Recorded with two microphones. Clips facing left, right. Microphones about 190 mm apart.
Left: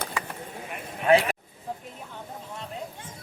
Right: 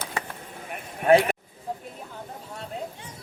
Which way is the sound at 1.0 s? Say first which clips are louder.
Right 2 dB; 45° right (ahead or behind).